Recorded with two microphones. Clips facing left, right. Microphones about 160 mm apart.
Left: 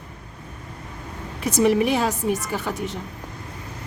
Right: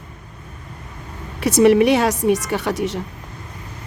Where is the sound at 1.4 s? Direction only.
75° right (ahead or behind).